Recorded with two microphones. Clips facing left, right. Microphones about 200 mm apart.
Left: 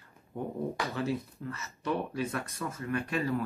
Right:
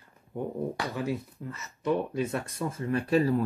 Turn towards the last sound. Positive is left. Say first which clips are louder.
# right 6 dB
turn(degrees=-35)  # may be behind; listen again after turning